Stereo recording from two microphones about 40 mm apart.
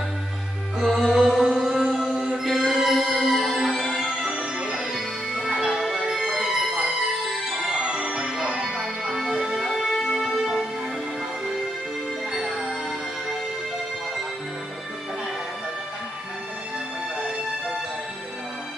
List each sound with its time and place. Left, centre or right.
0.7 s music: centre
1.0 s music: centre
1.6 s music: centre
4.2 s music: centre
4.7 s music: centre
7.7 s music: right
9.2 s music: centre
10.2 s music: centre
12.4 s music: centre